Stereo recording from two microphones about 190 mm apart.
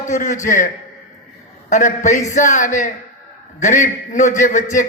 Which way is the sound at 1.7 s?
40° left (ahead or behind).